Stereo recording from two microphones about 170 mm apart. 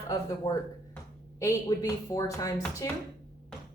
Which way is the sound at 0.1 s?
25° left (ahead or behind).